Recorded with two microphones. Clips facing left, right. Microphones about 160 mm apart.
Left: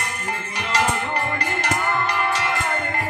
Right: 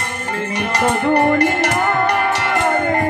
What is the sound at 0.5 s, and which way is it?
Music, 60° right (ahead or behind).